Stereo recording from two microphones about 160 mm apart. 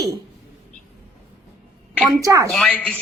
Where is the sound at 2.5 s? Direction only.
Centre (ahead or behind).